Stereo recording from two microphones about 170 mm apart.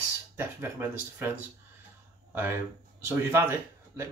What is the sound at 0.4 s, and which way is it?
Speech, 15° right (ahead or behind).